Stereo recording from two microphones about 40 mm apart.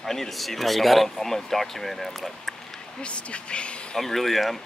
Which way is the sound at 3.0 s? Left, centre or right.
Left.